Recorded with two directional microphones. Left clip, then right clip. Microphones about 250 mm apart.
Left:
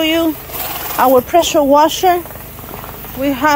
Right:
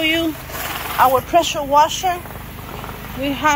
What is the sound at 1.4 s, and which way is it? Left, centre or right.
Speech, left.